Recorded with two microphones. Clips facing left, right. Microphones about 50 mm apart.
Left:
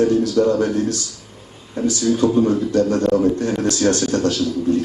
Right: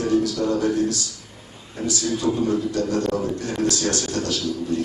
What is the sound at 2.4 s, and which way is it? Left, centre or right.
A man's voice, left.